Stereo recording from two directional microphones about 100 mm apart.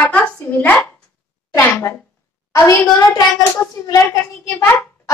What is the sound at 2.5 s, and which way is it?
Speech, 30° left (ahead or behind).